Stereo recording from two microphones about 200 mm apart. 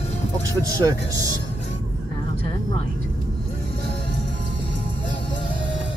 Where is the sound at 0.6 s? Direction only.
15° right (ahead or behind).